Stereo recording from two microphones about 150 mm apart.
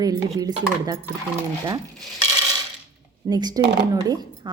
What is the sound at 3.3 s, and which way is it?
Speech, 30° right (ahead or behind).